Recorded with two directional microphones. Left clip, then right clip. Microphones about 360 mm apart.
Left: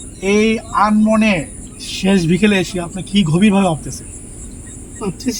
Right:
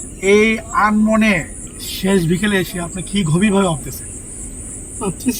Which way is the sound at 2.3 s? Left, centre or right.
Centre.